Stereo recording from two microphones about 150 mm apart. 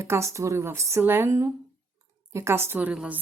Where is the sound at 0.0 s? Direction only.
20° right (ahead or behind).